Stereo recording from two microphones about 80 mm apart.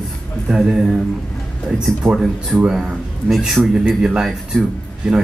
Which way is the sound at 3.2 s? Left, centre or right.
Centre.